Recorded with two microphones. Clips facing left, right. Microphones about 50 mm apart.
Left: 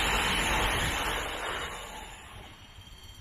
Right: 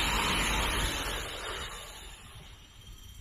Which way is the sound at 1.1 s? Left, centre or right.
Left.